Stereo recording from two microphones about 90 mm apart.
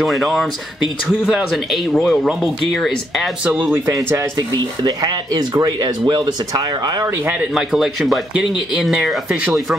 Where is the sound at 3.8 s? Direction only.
35° right (ahead or behind).